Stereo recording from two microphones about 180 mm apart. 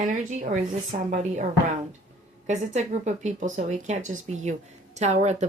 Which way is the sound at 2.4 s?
40° right (ahead or behind).